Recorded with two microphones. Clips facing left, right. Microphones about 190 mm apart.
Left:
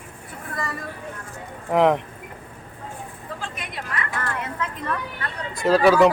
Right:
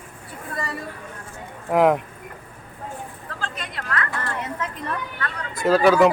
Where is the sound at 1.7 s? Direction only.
5° right (ahead or behind).